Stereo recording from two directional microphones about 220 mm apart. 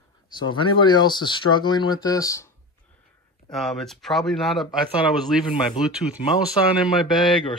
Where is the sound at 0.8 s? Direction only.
20° left (ahead or behind).